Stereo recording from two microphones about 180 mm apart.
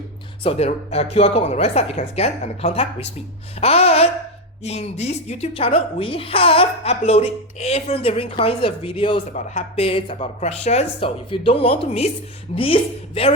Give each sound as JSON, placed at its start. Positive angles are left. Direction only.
{"t": 0.4, "sound": "a woman's voice", "side_deg": 35}